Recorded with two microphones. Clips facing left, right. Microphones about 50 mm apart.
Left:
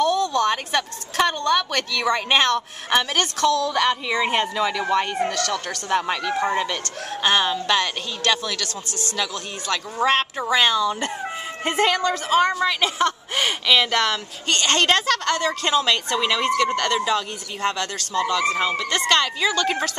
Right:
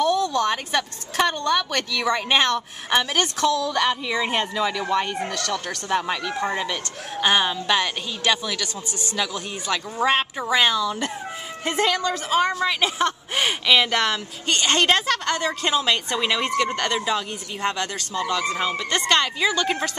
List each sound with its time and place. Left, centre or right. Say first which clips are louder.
0.0 s a woman's voice: left 1 dB; centre
6.7 s speech: left 1 dB; centre
10.8 s speech: left 2 dB; centre
11.8 s speech: left 2 dB; centre
12.3 s speech: left 2 dB; centre
18.9 s speech: right 2 dB; centre